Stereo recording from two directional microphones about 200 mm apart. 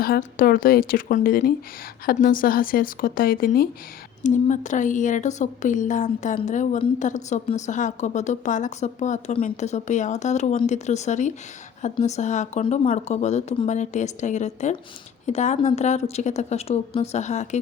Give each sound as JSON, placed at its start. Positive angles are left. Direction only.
{"t": 0.0, "sound": "speech", "side_deg": 45}
{"t": 4.2, "sound": "speech", "side_deg": 40}